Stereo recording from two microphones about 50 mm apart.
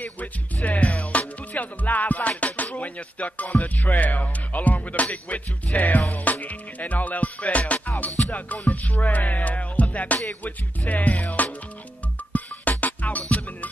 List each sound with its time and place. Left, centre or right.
0.0 s speech: left
1.1 s music: left
3.6 s speech: left
5.8 s speech: left
8.6 s music: left
10.9 s speech: left
12.3 s music: left